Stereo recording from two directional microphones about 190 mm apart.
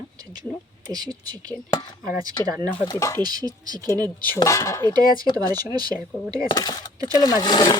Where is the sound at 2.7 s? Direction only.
20° left (ahead or behind).